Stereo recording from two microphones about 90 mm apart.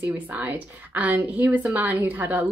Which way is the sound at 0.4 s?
15° right (ahead or behind).